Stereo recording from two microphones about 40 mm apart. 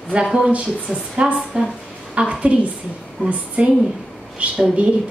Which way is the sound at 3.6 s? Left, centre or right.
Right.